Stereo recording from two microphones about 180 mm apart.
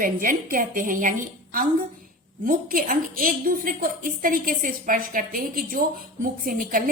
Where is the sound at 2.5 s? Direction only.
50° right (ahead or behind).